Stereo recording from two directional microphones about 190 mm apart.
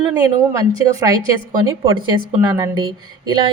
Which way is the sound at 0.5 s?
20° right (ahead or behind).